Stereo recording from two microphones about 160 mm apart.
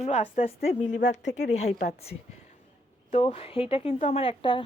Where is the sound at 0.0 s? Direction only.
45° left (ahead or behind).